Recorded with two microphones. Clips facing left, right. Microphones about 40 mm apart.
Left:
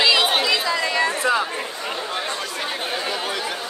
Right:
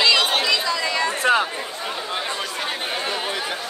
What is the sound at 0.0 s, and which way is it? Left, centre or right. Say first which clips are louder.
Chatter: even; centre.